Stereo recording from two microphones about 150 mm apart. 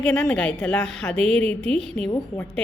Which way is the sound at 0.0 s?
5° left (ahead or behind).